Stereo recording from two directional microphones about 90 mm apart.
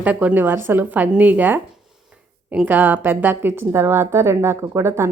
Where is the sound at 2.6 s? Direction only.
20° right (ahead or behind).